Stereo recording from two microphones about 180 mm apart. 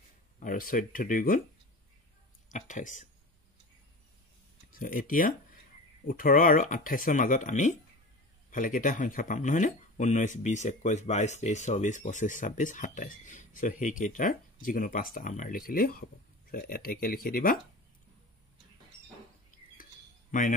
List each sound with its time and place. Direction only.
0.4 s speech: 50° left (ahead or behind)
2.5 s speech: 45° left (ahead or behind)
4.7 s speech: 50° left (ahead or behind)
19.8 s bird: 45° left (ahead or behind)